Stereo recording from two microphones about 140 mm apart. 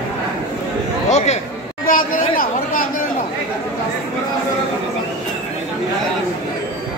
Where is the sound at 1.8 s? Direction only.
80° left.